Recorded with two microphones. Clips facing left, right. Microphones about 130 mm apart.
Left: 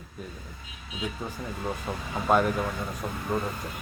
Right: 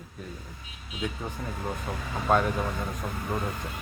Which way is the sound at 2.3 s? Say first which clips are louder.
Left 1 dB; 5° left (ahead or behind).